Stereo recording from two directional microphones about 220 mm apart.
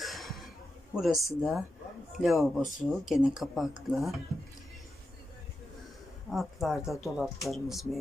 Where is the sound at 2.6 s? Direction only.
35° left (ahead or behind).